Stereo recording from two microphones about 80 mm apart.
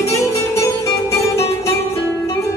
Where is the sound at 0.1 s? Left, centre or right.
Left.